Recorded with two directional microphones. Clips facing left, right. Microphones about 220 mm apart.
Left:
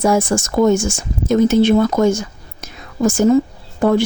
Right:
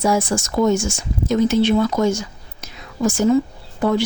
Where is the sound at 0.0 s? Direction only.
50° left (ahead or behind).